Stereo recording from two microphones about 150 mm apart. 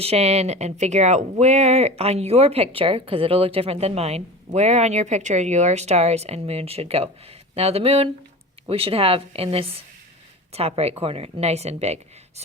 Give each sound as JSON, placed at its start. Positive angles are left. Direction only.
{"t": 0.0, "sound": "speech", "side_deg": -45}